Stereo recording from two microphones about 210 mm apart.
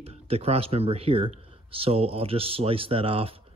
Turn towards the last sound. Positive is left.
turn(degrees=-25)  # may be behind; listen again after turning